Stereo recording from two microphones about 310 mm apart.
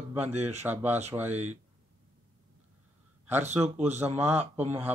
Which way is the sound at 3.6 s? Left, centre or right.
Right.